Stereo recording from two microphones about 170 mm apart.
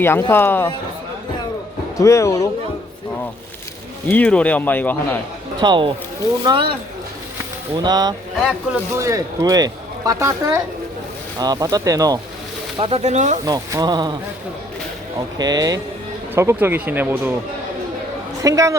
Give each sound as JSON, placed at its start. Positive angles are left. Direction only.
{"t": 0.0, "sound": "speech", "side_deg": 15}
{"t": 2.0, "sound": "speech", "side_deg": 20}
{"t": 4.1, "sound": "speech", "side_deg": 5}
{"t": 5.5, "sound": "a woman's voice", "side_deg": -25}
{"t": 7.8, "sound": "a woman's voice", "side_deg": -25}
{"t": 12.8, "sound": "speech", "side_deg": -40}
{"t": 13.4, "sound": "a woman's voice", "side_deg": -20}
{"t": 15.4, "sound": "a woman's voice", "side_deg": -20}
{"t": 18.4, "sound": "a woman's voice", "side_deg": -20}